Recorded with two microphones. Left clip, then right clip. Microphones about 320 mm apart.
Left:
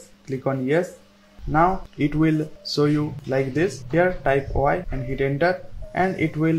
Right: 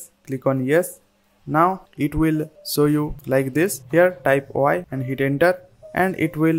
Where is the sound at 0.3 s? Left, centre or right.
Right.